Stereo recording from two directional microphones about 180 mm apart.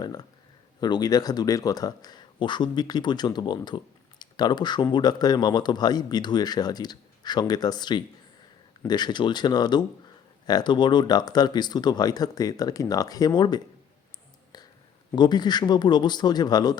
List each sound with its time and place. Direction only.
0.0 s speech: 20° left (ahead or behind)
14.5 s a sound: 20° left (ahead or behind)
15.1 s speech: 25° left (ahead or behind)